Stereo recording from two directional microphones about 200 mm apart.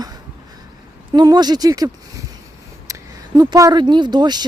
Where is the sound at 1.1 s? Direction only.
20° right (ahead or behind).